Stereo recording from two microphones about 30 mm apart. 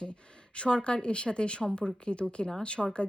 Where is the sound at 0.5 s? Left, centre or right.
Left.